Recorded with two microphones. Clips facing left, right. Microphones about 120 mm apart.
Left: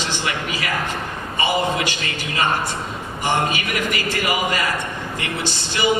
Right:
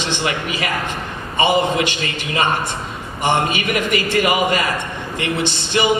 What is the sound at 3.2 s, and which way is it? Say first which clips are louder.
A man's voice: right 3 dB; 20° right (ahead or behind).